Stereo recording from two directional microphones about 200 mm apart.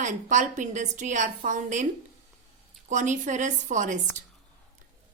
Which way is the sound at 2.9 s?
40° right (ahead or behind).